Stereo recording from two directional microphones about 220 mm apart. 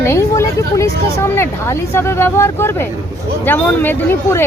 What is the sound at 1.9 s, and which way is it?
Speech, 10° left (ahead or behind).